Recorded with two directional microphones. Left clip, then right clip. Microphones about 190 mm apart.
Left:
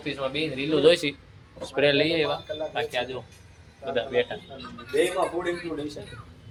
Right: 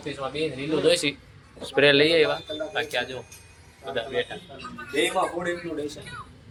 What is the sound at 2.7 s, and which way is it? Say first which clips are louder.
Speech: right 2 dB; 10° left (ahead or behind).